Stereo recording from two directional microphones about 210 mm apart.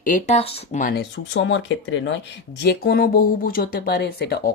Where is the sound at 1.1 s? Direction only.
60° left (ahead or behind).